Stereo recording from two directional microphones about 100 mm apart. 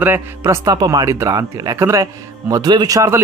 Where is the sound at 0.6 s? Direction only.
40° right (ahead or behind).